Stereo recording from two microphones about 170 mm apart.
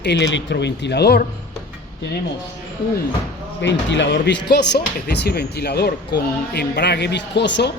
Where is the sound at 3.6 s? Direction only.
90° left.